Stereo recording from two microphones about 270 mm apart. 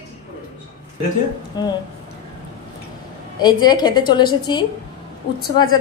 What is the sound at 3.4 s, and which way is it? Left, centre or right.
A woman's voice, centre.